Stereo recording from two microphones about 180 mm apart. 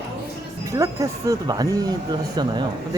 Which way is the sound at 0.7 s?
20° right (ahead or behind).